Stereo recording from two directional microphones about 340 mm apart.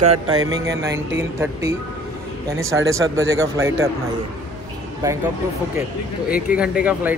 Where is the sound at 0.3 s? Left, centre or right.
Right.